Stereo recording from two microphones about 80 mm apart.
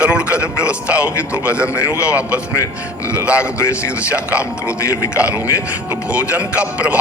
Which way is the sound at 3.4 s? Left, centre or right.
Left.